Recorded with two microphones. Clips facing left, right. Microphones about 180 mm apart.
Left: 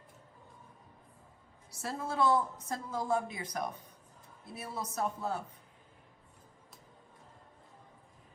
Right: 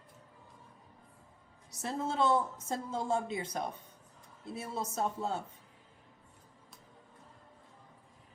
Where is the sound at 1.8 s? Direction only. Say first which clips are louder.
Even; 25° right (ahead or behind).